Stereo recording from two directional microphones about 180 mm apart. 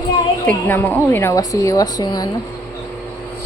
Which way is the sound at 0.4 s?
10° left (ahead or behind).